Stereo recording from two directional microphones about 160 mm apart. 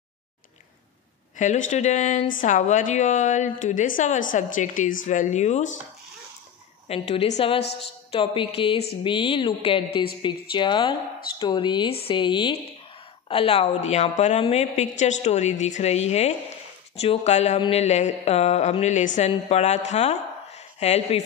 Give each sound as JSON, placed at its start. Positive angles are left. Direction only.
{"t": 1.3, "sound": "speech", "side_deg": 50}
{"t": 6.9, "sound": "a woman's voice", "side_deg": 40}
{"t": 19.9, "sound": "a sound", "side_deg": 45}